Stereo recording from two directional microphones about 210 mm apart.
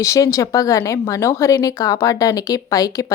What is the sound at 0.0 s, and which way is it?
A woman's voice, 15° left (ahead or behind).